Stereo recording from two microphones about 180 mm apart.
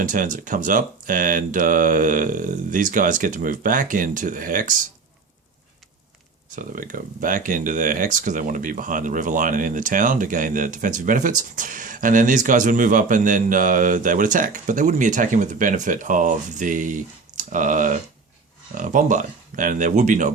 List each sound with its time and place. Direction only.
0.0 s speech: 45° right (ahead or behind)
6.6 s speech: 50° right (ahead or behind)